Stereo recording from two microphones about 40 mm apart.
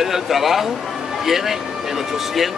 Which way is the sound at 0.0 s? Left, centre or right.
Centre.